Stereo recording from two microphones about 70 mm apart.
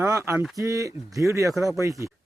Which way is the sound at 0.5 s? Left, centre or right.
Right.